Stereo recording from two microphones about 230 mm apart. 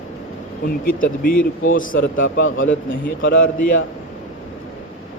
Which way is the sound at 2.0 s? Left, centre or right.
Left.